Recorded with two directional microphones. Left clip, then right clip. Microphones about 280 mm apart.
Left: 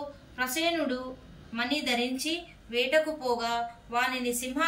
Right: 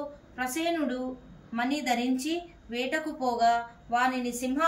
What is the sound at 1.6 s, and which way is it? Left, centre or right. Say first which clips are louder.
A woman's voice: even; centre.